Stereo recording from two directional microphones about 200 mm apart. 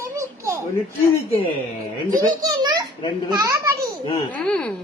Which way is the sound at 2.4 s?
20° right (ahead or behind).